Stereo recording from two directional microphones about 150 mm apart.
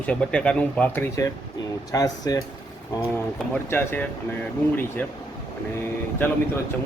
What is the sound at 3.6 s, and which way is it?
Speech, 15° left (ahead or behind).